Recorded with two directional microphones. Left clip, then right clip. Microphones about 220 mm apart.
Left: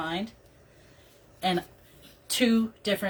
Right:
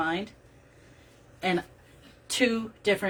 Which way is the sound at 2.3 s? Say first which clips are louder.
Even; 20° right (ahead or behind).